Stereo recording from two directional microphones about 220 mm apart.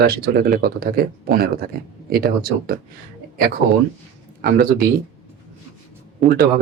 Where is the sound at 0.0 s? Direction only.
45° right (ahead or behind).